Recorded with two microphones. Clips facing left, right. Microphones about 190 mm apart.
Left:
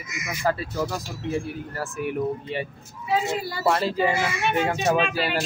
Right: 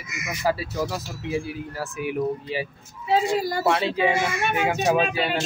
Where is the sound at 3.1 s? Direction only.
40° right (ahead or behind).